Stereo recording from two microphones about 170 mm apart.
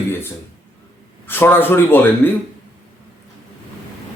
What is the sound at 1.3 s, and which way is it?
A man's voice, 10° left (ahead or behind).